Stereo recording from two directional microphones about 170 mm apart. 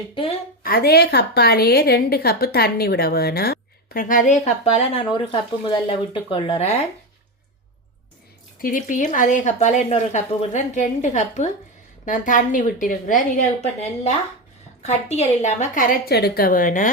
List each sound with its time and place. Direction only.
0.1 s a woman's voice: 30° left (ahead or behind)
0.6 s a woman's voice: 65° left (ahead or behind); by 6.7 s 35° left (ahead or behind)
8.6 s speech: 50° left (ahead or behind)